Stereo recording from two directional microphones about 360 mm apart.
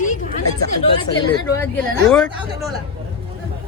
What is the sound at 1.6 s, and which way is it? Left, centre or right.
Speech, centre.